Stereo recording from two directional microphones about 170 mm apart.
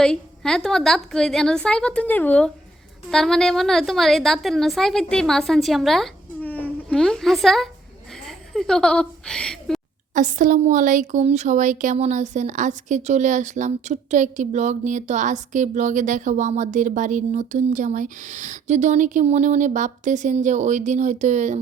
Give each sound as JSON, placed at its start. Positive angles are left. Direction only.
{"t": 0.0, "sound": "a woman's voice", "side_deg": 5}
{"t": 10.2, "sound": "a woman's voice", "side_deg": -50}